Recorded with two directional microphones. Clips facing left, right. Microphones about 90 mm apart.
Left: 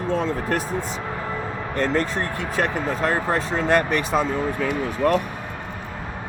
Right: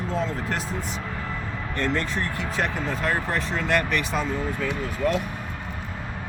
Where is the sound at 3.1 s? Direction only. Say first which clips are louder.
Left 4 dB; 35° left (ahead or behind).